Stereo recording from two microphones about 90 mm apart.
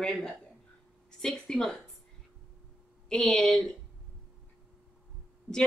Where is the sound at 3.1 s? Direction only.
10° left (ahead or behind).